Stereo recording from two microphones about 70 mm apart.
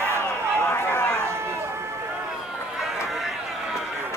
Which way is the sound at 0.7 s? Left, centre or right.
Left.